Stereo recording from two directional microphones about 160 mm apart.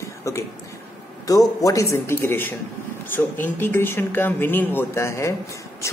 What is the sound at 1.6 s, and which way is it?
Speech, 20° left (ahead or behind).